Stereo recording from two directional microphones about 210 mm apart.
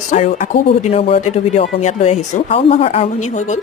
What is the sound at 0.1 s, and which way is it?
A woman's voice, 35° left (ahead or behind).